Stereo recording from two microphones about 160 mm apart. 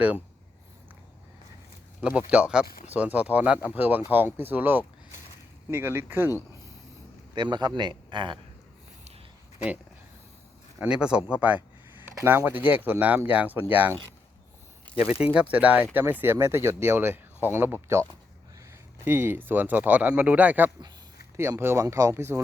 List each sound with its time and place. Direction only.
2.0 s speech: 5° right (ahead or behind)
7.3 s a man's voice: 30° right (ahead or behind)
10.8 s speech: 5° right (ahead or behind)
15.2 s speech: 10° right (ahead or behind)
19.0 s speech: 15° right (ahead or behind)